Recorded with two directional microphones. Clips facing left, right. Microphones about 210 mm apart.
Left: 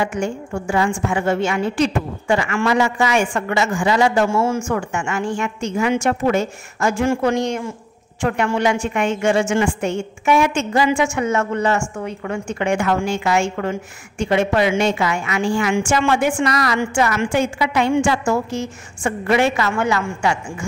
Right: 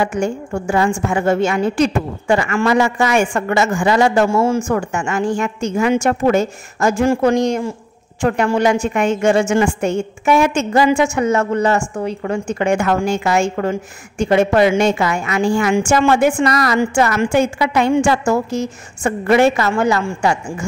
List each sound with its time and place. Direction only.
0.0 s a woman's voice: 40° right (ahead or behind)